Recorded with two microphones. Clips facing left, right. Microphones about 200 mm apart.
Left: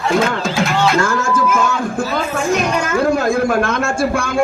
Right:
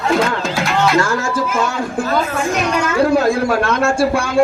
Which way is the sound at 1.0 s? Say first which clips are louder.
Left 2 dB; 50° left (ahead or behind).